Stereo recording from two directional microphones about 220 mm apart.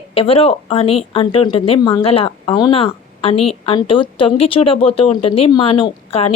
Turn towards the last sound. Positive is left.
turn(degrees=25)  # may be behind; listen again after turning